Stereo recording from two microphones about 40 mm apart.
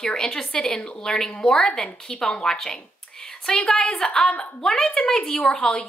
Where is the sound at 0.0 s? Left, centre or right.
Centre.